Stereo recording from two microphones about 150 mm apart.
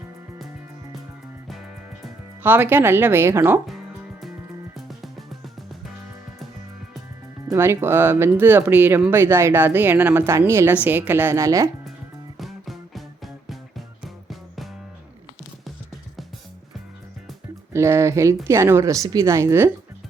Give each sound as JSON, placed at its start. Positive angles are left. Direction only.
{"t": 2.4, "sound": "speech", "side_deg": -15}
{"t": 4.7, "sound": "music", "side_deg": 0}
{"t": 7.4, "sound": "speech", "side_deg": -15}
{"t": 12.4, "sound": "music", "side_deg": 0}
{"t": 17.7, "sound": "speech", "side_deg": -20}